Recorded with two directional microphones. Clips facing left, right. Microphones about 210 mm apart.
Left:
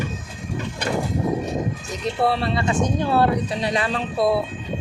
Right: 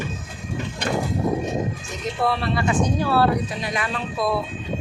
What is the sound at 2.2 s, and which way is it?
Speech, 30° left (ahead or behind).